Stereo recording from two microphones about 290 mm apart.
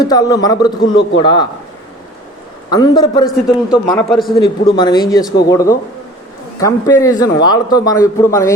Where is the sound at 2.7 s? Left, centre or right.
Centre.